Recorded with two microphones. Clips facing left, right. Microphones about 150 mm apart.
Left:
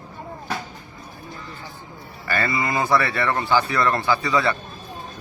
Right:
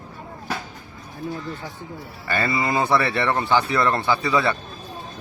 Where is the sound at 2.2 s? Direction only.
25° right (ahead or behind).